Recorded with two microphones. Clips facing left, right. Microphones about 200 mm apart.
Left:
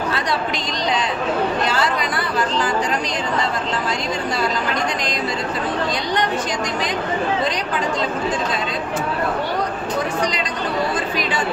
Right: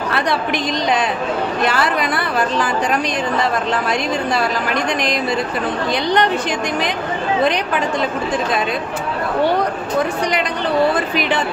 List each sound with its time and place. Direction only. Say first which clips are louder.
1.7 s speech: right 2 dB; 60° right (ahead or behind)